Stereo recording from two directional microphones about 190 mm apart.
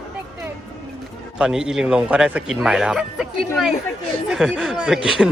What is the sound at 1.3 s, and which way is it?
Speech, 5° right (ahead or behind).